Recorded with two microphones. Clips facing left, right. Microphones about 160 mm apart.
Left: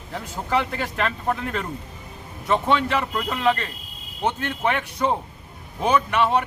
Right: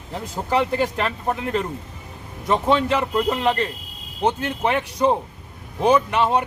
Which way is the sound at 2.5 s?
35° right (ahead or behind).